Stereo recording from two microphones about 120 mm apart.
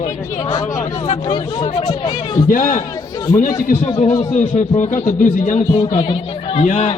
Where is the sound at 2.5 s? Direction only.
90° left.